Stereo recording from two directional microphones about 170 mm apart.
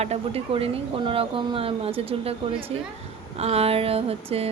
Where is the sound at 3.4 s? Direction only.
35° right (ahead or behind).